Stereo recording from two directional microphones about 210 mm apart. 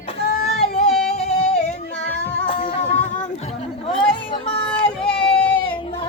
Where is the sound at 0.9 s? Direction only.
Centre (ahead or behind).